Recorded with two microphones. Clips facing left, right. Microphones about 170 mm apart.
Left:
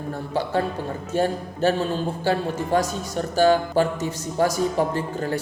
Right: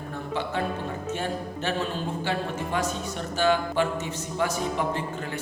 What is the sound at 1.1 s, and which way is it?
Speech, 35° left (ahead or behind).